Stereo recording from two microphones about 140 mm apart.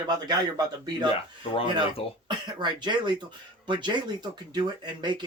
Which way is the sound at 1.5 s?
40° left (ahead or behind).